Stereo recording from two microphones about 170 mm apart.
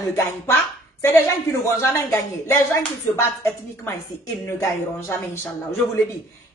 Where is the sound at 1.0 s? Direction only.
15° left (ahead or behind).